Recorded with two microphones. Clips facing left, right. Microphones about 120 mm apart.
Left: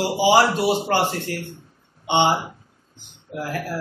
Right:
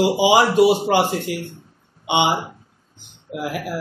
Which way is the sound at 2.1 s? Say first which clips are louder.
Even; 15° right (ahead or behind).